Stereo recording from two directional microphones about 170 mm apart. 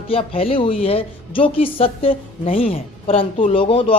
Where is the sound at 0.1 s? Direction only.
35° left (ahead or behind).